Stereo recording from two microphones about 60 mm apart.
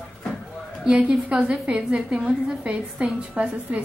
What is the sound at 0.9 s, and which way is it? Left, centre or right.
A woman's voice, right.